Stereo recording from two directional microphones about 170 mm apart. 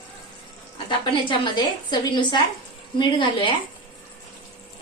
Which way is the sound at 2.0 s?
25° left (ahead or behind).